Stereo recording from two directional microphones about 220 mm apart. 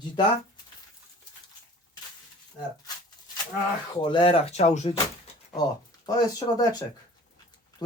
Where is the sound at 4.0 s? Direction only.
20° left (ahead or behind).